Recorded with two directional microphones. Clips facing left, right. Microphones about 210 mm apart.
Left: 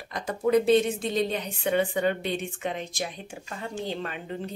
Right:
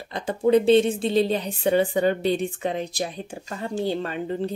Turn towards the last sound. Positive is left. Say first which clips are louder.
# right 7 dB
turn(degrees=-35)  # may be behind; listen again after turning